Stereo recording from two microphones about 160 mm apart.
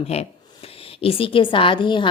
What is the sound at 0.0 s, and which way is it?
A woman's voice, 40° left (ahead or behind).